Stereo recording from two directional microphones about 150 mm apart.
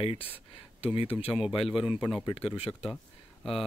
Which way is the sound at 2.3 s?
40° left (ahead or behind).